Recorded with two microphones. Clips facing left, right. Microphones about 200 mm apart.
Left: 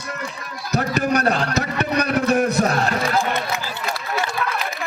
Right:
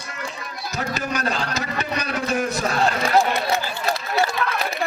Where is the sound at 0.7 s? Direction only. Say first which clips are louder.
Left 7 dB; 60° left (ahead or behind).